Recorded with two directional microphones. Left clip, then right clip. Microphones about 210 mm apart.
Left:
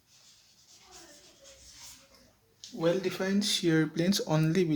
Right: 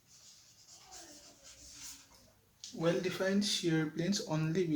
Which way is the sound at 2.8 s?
40° left (ahead or behind).